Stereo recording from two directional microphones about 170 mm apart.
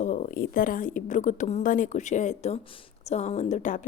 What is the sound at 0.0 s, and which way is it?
Speech, 45° left (ahead or behind).